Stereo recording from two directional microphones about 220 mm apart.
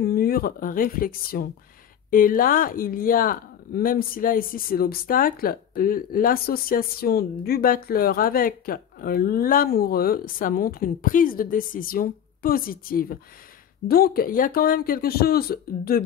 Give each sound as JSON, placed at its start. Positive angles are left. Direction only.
{"t": 0.0, "sound": "speech", "side_deg": 45}